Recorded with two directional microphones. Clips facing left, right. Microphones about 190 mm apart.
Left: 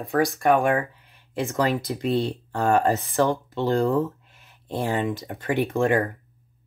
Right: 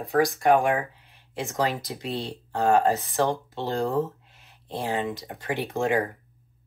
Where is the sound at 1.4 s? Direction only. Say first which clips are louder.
Left 4 dB; 55° left (ahead or behind).